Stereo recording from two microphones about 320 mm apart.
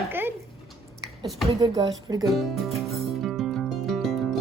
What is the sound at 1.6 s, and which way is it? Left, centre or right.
Speech, centre.